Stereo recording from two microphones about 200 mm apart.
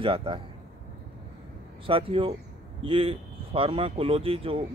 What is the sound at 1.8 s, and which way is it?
Speech, 25° right (ahead or behind).